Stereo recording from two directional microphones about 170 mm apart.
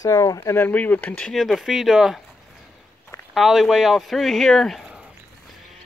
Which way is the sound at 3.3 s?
Centre (ahead or behind).